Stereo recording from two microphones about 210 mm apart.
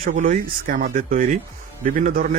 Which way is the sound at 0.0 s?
40° right (ahead or behind).